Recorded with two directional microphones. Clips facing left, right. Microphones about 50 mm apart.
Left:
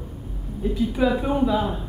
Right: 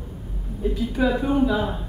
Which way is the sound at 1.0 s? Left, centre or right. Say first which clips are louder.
Right 1 dB; centre.